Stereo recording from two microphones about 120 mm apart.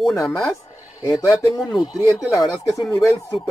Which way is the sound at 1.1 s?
30° left (ahead or behind).